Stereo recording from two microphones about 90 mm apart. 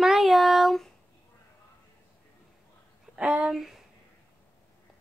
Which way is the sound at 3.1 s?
10° right (ahead or behind).